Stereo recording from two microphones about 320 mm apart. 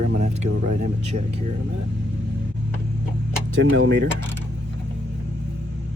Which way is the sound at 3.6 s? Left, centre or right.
Right.